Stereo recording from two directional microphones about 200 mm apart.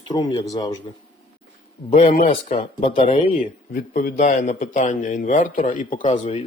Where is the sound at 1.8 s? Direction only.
35° left (ahead or behind).